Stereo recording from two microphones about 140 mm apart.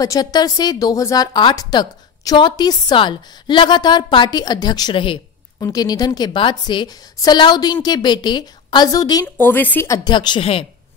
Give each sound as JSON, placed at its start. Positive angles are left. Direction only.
{"t": 0.0, "sound": "a woman's voice", "side_deg": 25}
{"t": 5.6, "sound": "a woman's voice", "side_deg": 25}
{"t": 9.4, "sound": "a woman's voice", "side_deg": 15}
{"t": 10.1, "sound": "a woman's voice", "side_deg": 35}